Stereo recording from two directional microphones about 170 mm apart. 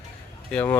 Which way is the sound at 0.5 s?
10° left (ahead or behind).